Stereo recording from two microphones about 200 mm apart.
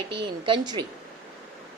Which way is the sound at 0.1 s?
25° right (ahead or behind).